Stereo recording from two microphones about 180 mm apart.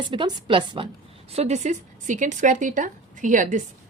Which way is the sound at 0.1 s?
25° right (ahead or behind).